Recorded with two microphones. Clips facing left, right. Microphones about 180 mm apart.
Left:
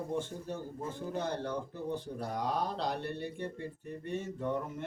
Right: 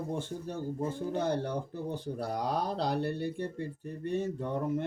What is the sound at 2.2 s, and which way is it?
Speech, 35° right (ahead or behind).